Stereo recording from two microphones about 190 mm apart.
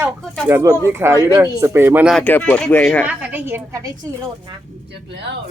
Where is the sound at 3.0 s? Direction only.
10° right (ahead or behind).